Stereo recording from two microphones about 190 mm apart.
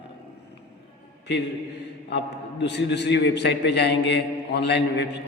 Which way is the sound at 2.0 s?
65° left (ahead or behind).